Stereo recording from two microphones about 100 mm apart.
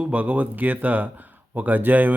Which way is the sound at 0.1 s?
15° right (ahead or behind).